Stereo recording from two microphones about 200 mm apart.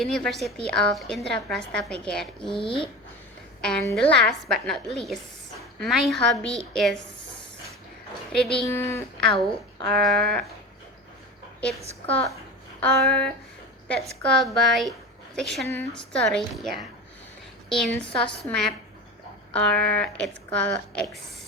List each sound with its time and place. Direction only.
0.0 s speech: centre (ahead or behind)
2.6 s speech: 25° left (ahead or behind)
3.6 s speech: 5° left (ahead or behind)
8.3 s speech: centre (ahead or behind)
8.6 s speech: 15° left (ahead or behind)
9.9 s speech: centre (ahead or behind)
12.8 s speech: 5° left (ahead or behind)